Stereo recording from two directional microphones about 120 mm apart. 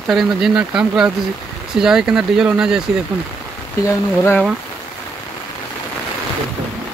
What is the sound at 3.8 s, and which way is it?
Speech, 20° left (ahead or behind).